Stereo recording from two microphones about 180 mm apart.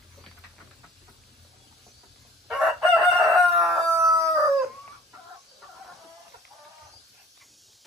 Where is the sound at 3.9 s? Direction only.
15° right (ahead or behind).